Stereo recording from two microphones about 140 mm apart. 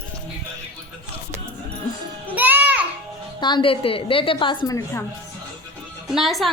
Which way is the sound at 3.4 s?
35° left (ahead or behind).